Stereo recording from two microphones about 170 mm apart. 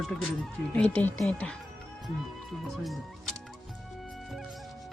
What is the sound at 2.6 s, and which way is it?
Speech, centre (ahead or behind).